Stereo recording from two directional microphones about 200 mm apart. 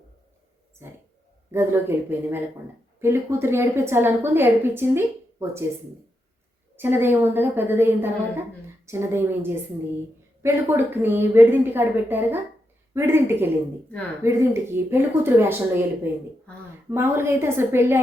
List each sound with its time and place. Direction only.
0.8 s a sound: 15° right (ahead or behind)
1.5 s a woman's voice: 10° right (ahead or behind)
6.7 s a woman's voice: 10° right (ahead or behind)